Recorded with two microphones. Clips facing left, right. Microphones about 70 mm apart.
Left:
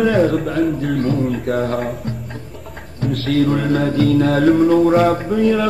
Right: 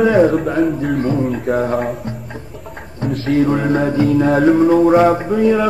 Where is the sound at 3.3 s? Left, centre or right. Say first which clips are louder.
Right 2 dB; centre.